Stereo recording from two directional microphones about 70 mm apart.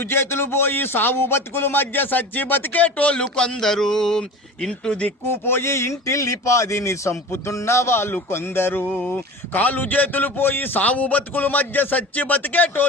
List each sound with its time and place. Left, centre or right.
0.1 s speech: left; by 4.2 s centre
4.9 s speech: centre
5.2 s a man's voice: left
9.0 s speech: left